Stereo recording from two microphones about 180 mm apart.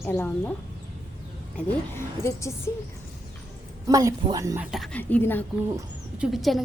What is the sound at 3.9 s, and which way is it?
Speech, 20° right (ahead or behind).